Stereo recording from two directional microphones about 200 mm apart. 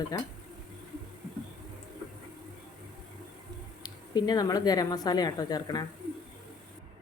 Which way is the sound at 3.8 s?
20° left (ahead or behind).